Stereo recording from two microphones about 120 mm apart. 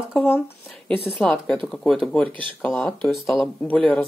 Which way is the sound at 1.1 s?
5° left (ahead or behind).